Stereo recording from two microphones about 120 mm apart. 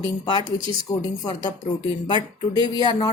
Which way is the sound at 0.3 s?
40° left (ahead or behind).